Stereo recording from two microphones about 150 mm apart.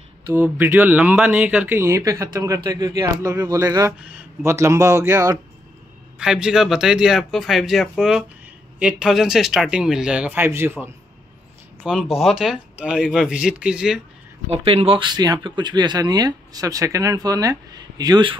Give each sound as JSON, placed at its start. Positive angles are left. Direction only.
{"t": 0.3, "sound": "speech", "side_deg": -15}
{"t": 1.8, "sound": "speech", "side_deg": -20}
{"t": 6.1, "sound": "speech", "side_deg": -5}
{"t": 11.8, "sound": "speech", "side_deg": -5}
{"t": 14.5, "sound": "speech", "side_deg": -40}